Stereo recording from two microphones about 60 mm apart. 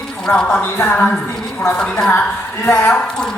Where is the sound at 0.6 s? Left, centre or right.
Left.